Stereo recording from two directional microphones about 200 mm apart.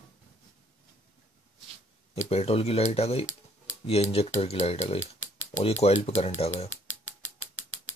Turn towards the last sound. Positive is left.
turn(degrees=10)  # may be behind; listen again after turning